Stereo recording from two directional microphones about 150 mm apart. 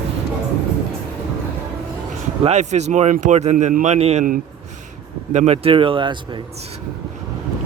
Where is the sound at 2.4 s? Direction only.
50° right (ahead or behind).